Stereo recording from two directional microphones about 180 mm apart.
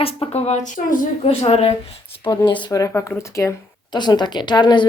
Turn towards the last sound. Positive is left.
turn(degrees=25)  # may be behind; listen again after turning